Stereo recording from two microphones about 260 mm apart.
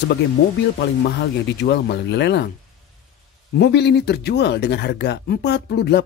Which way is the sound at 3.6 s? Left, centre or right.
Left.